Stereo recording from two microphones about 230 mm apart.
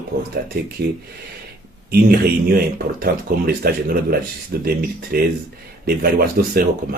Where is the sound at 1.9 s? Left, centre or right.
Right.